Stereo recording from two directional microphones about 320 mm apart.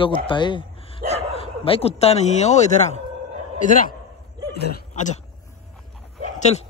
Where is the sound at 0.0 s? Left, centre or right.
Centre.